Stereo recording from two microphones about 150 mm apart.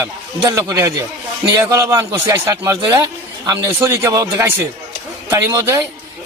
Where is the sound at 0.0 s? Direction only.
20° right (ahead or behind).